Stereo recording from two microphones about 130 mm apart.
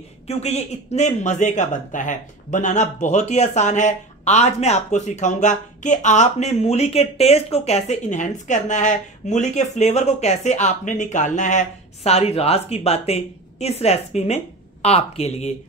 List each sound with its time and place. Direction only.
0.3 s speech: 55° left (ahead or behind)